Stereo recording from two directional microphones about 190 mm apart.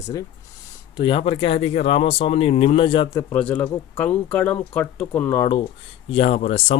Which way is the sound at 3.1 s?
15° left (ahead or behind).